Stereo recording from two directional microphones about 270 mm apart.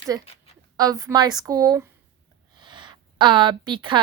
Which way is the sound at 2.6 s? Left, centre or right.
Centre.